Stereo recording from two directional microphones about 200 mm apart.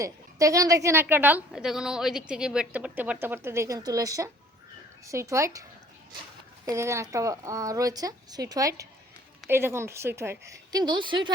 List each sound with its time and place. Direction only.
0.0 s a woman's voice: 15° right (ahead or behind)
6.7 s a woman's voice: 15° right (ahead or behind)